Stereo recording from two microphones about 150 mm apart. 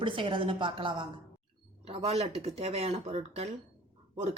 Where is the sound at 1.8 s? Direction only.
45° right (ahead or behind).